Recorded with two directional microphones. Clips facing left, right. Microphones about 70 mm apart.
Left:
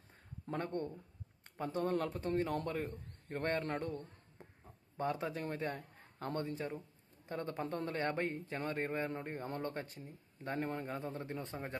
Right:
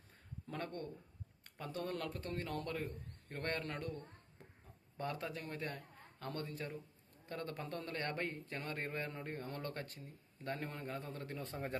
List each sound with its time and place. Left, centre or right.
0.5 s a man's voice: left
4.9 s a man's voice: centre